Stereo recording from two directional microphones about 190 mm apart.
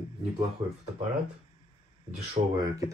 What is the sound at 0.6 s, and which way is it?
Speech, 25° right (ahead or behind).